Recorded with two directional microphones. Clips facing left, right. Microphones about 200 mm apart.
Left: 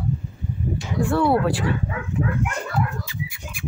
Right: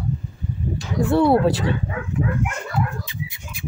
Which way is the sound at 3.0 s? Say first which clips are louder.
Even; 20° right (ahead or behind).